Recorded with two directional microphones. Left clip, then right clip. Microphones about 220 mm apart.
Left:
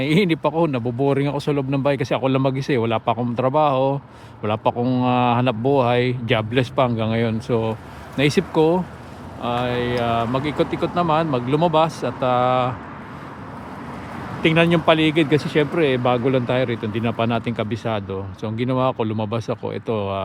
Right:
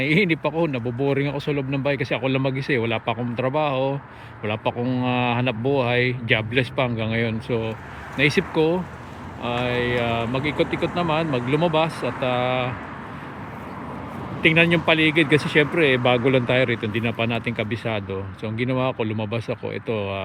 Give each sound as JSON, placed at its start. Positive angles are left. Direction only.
{"t": 0.0, "sound": "speech", "side_deg": 15}
{"t": 14.4, "sound": "speech", "side_deg": 15}